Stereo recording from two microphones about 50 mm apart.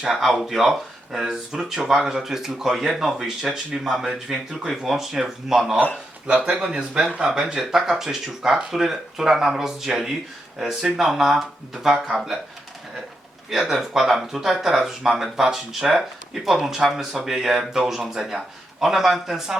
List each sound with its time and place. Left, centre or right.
0.1 s speech: centre
6.4 s speech: centre
13.5 s speech: centre